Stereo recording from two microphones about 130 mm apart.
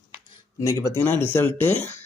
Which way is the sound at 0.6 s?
25° left (ahead or behind).